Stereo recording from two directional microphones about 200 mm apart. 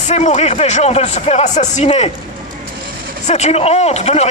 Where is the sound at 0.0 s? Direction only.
35° left (ahead or behind).